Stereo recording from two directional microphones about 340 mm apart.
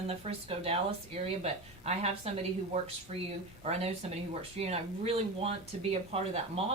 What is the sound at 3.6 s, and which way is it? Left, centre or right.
Speech, centre.